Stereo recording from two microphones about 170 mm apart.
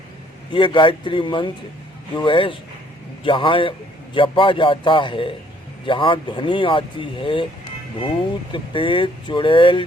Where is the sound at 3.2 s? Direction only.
30° left (ahead or behind).